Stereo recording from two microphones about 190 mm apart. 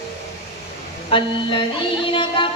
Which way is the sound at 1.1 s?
25° left (ahead or behind).